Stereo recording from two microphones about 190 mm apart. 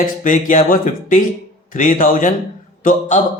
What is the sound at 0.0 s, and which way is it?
Speech, 45° left (ahead or behind).